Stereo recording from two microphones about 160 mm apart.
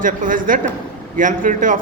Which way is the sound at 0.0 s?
55° right (ahead or behind).